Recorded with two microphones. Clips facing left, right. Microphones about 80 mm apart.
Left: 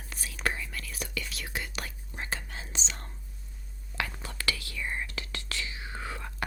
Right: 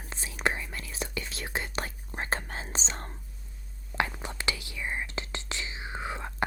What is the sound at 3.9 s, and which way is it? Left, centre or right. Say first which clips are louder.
Whispering: right 5 dB; right.